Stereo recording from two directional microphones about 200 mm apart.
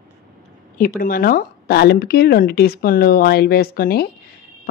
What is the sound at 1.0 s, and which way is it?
Speech, 45° left (ahead or behind).